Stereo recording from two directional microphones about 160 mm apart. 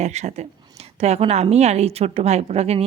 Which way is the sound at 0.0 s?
45° right (ahead or behind).